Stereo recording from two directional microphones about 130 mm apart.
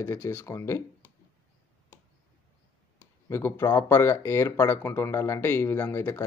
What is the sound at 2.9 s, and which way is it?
Speech, 20° left (ahead or behind).